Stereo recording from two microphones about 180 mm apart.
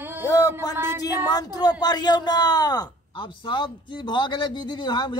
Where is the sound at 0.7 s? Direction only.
15° right (ahead or behind).